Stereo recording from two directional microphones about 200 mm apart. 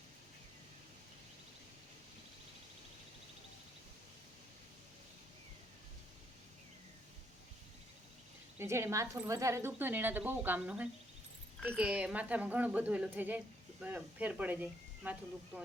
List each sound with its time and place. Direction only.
8.5 s a woman's voice: 15° right (ahead or behind)